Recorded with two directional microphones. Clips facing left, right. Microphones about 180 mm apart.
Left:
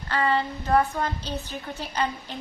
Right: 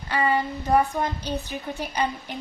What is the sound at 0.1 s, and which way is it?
A woman's voice, 15° right (ahead or behind).